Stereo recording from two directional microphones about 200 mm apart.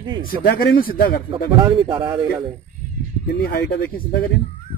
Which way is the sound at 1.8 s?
25° right (ahead or behind).